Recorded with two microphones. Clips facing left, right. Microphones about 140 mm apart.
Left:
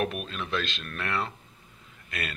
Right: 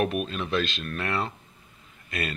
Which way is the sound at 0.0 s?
5° right (ahead or behind).